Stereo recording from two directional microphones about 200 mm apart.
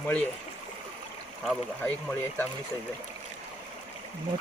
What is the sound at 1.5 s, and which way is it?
Speech, 5° left (ahead or behind).